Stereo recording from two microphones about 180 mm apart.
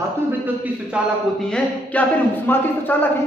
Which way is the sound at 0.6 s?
10° right (ahead or behind).